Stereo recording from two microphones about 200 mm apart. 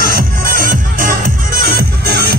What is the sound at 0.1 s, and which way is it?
Music, 45° right (ahead or behind).